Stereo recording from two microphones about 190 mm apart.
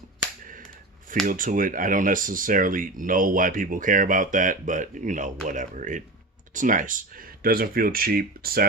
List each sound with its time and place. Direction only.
1.3 s speech: 45° right (ahead or behind)